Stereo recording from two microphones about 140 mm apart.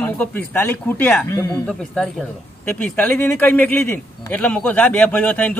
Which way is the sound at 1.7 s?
5° left (ahead or behind).